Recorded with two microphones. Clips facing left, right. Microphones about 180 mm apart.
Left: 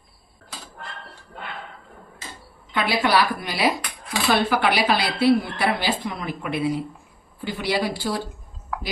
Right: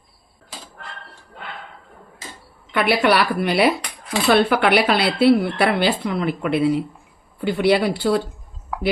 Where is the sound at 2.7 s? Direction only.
70° right (ahead or behind).